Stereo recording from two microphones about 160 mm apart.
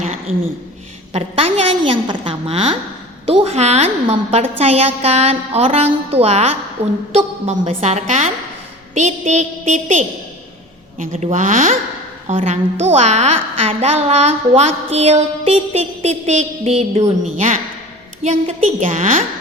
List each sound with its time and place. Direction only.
0.0 s a sound: 45° right (ahead or behind)
1.1 s a woman's voice: 40° right (ahead or behind)
11.1 s a woman's voice: 45° right (ahead or behind)
12.3 s a woman's voice: 40° right (ahead or behind)
18.2 s a woman's voice: 45° right (ahead or behind)